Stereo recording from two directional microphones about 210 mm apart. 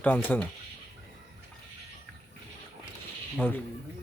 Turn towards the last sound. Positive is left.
turn(degrees=10)  # may be behind; listen again after turning